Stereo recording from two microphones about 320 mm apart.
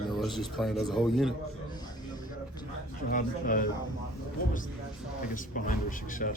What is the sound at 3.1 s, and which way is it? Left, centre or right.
Speech, left.